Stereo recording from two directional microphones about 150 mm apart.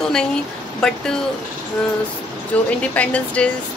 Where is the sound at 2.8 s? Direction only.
10° left (ahead or behind).